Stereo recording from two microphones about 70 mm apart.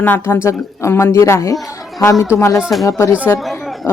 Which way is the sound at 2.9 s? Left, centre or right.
Left.